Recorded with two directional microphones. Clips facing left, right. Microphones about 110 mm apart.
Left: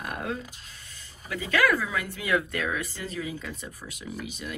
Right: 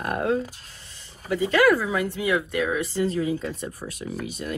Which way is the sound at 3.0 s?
40° right (ahead or behind).